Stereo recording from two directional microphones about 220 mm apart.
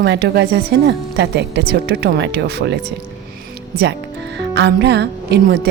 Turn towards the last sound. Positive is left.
turn(degrees=-50)  # may be behind; listen again after turning